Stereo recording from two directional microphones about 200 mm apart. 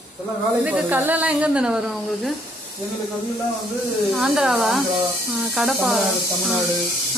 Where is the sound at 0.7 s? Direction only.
5° right (ahead or behind).